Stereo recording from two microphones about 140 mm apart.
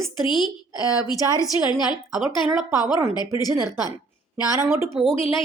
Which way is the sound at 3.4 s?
25° left (ahead or behind).